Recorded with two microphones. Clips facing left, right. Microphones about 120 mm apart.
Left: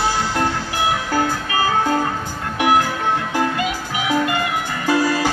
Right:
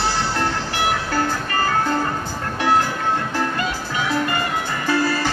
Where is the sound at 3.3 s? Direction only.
10° left (ahead or behind).